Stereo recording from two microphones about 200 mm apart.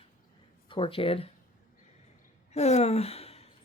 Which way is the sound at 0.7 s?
25° left (ahead or behind).